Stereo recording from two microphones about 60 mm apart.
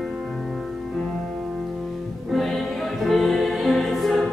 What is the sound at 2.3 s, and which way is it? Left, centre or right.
Music, centre.